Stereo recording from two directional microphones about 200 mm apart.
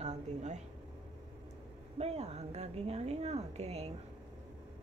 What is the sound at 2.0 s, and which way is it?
Speech, 30° right (ahead or behind).